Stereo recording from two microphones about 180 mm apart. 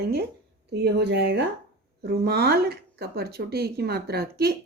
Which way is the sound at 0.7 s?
70° right (ahead or behind).